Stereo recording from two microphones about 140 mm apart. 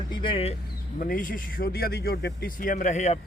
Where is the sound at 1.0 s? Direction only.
75° left (ahead or behind).